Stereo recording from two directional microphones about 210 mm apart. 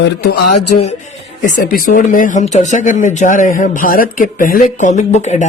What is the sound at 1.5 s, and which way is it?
A man's voice, 45° left (ahead or behind).